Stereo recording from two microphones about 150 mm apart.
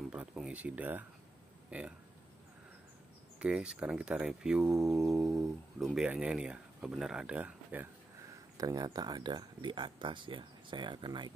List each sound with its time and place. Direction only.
0.1 s a sound: 5° right (ahead or behind)
1.7 s speech: 10° right (ahead or behind)
3.3 s speech: 5° right (ahead or behind)
8.5 s speech: 25° right (ahead or behind)